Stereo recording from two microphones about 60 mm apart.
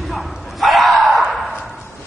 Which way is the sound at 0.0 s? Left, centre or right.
Centre.